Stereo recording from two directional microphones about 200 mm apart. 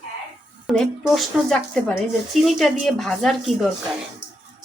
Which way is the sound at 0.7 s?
Centre (ahead or behind).